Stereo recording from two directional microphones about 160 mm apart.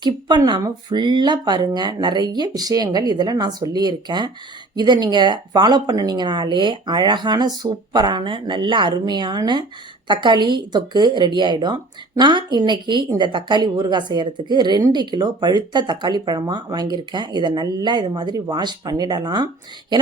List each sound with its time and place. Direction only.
0.0 s a woman's voice: 30° right (ahead or behind)